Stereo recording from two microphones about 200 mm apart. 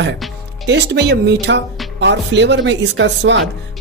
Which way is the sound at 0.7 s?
55° right (ahead or behind).